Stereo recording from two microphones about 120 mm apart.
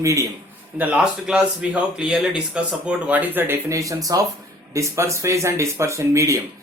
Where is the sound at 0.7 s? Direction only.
15° right (ahead or behind).